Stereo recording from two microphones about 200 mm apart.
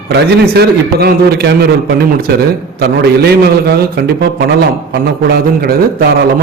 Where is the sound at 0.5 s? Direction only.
50° right (ahead or behind).